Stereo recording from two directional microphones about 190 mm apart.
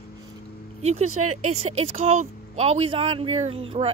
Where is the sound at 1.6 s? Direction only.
35° right (ahead or behind).